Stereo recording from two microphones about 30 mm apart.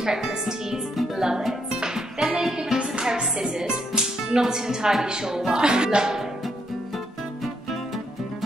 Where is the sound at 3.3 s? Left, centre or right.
Centre.